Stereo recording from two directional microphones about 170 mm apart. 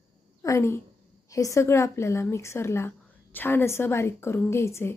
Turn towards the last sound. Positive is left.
turn(degrees=15)  # may be behind; listen again after turning